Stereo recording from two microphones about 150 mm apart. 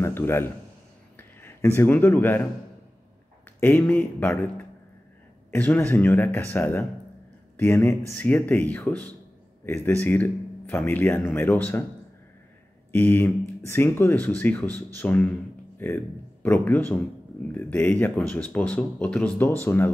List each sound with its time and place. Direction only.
0.0 s a man's voice: 15° left (ahead or behind)
1.1 s a sound: 15° left (ahead or behind)
1.8 s speech: 15° left (ahead or behind)
3.5 s speech: 10° left (ahead or behind)
12.9 s speech: 15° left (ahead or behind)